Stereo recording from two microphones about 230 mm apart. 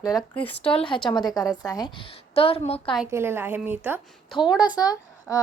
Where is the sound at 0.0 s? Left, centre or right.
Centre.